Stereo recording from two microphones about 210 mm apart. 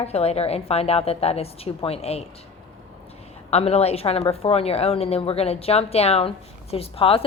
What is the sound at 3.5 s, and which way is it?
A woman's voice, 30° left (ahead or behind).